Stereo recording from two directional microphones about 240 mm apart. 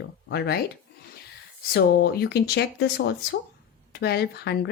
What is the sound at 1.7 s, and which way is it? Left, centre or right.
Speech, left.